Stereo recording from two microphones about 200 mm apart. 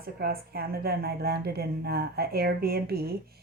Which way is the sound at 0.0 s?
50° right (ahead or behind).